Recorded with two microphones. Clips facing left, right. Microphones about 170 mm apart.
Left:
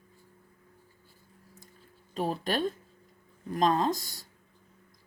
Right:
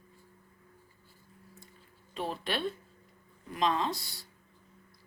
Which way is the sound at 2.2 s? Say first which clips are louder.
Left 5 dB; 40° left (ahead or behind).